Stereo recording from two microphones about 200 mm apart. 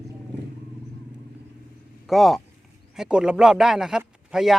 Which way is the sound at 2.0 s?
Centre (ahead or behind).